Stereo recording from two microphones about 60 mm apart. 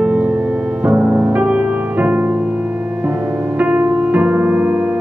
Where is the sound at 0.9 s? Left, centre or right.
Right.